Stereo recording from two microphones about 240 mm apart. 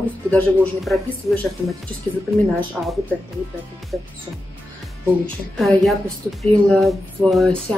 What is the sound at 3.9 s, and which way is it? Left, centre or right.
Speech, centre.